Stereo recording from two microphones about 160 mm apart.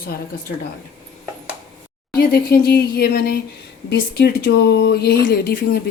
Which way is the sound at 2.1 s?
80° left.